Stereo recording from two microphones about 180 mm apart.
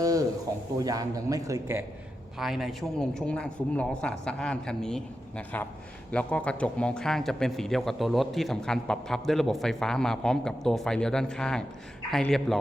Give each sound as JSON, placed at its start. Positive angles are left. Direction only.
{"t": 0.0, "sound": "a sound", "side_deg": -20}
{"t": 0.8, "sound": "a man's voice", "side_deg": -20}
{"t": 2.4, "sound": "a man's voice", "side_deg": 0}